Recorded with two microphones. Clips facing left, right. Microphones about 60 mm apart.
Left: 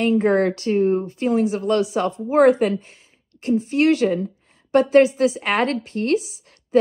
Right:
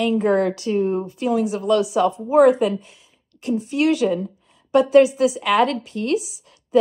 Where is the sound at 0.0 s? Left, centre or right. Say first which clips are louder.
Left 1 dB; left.